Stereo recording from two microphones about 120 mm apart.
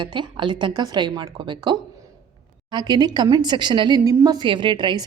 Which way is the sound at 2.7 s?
35° right (ahead or behind).